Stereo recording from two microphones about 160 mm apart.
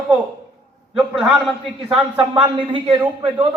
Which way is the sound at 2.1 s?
30° right (ahead or behind).